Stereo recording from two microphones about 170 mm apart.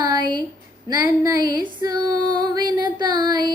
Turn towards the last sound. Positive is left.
turn(degrees=-25)  # may be behind; listen again after turning